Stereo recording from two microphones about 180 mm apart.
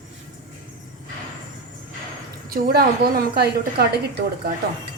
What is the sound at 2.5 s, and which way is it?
A woman's voice, 55° right (ahead or behind).